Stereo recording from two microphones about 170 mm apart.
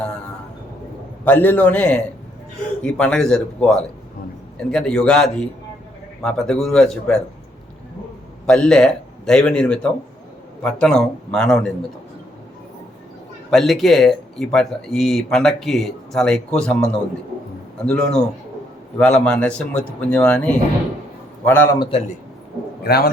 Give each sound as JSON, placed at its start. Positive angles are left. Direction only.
{"t": 1.2, "sound": "speech", "side_deg": 10}
{"t": 8.4, "sound": "speech", "side_deg": 5}
{"t": 13.5, "sound": "speech", "side_deg": 0}
{"t": 21.8, "sound": "a man's voice", "side_deg": 35}
{"t": 22.8, "sound": "a man's voice", "side_deg": 65}